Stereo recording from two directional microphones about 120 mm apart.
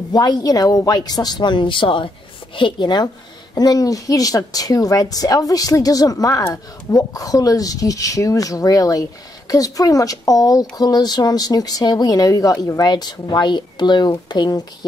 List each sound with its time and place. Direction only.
0.1 s a woman's voice: 35° left (ahead or behind)